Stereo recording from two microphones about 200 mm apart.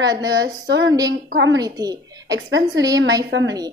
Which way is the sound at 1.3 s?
70° right (ahead or behind).